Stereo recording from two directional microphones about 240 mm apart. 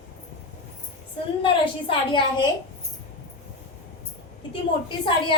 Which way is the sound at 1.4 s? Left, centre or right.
Left.